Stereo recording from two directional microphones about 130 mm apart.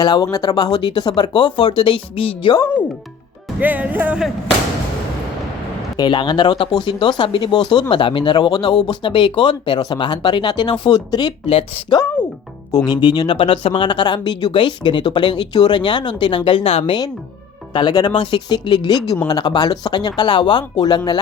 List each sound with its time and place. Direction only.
0.0 s speech: 30° left (ahead or behind)
3.6 s music: 15° right (ahead or behind)
6.0 s speech: 35° left (ahead or behind)
11.4 s speech: 50° left (ahead or behind)
12.7 s speech: 35° left (ahead or behind)
17.7 s speech: 35° left (ahead or behind)